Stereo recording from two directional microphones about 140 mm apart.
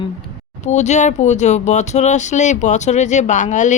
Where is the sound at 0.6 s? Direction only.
55° left (ahead or behind).